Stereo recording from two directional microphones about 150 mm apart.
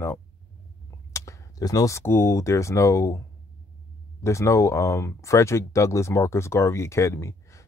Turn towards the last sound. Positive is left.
turn(degrees=20)  # may be behind; listen again after turning